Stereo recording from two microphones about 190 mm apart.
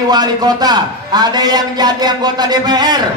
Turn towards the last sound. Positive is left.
turn(degrees=-20)  # may be behind; listen again after turning